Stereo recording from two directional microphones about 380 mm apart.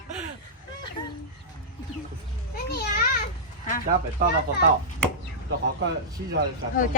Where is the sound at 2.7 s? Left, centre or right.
Left.